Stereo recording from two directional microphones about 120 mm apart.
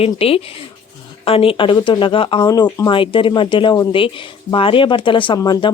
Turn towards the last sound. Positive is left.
turn(degrees=35)  # may be behind; listen again after turning